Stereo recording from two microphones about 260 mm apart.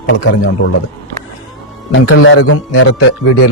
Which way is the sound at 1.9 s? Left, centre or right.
Left.